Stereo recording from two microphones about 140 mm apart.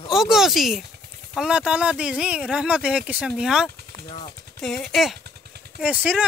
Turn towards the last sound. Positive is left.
turn(degrees=-10)  # may be behind; listen again after turning